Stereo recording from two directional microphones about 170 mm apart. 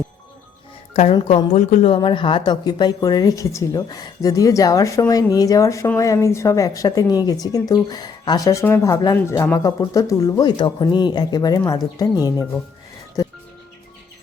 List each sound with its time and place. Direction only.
1.1 s a woman's voice: 30° left (ahead or behind)
1.5 s speech: 40° left (ahead or behind)
2.0 s a woman's voice: 30° left (ahead or behind)
13.2 s music: 20° left (ahead or behind)